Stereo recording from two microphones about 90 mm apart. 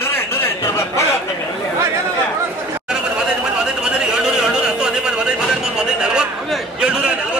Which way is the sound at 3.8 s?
10° right (ahead or behind).